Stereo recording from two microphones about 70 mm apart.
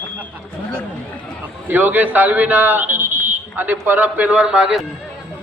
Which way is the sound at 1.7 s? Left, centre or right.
Right.